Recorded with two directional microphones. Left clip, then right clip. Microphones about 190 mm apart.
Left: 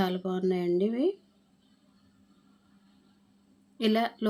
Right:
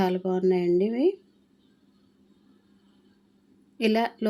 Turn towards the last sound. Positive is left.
turn(degrees=-15)  # may be behind; listen again after turning